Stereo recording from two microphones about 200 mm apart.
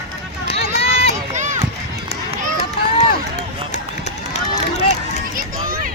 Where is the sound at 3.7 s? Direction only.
35° left (ahead or behind).